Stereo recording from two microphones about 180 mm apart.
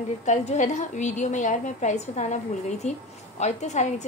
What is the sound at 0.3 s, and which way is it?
A woman's voice, 40° left (ahead or behind).